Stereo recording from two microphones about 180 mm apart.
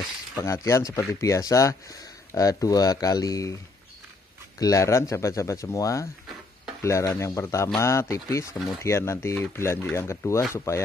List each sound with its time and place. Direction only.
0.4 s speech: 15° left (ahead or behind)
4.6 s speech: 20° left (ahead or behind)